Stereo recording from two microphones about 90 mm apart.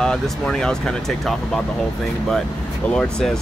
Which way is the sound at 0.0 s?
5° left (ahead or behind).